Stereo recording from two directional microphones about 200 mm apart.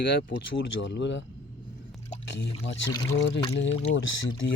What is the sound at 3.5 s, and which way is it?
Speech, 70° left (ahead or behind).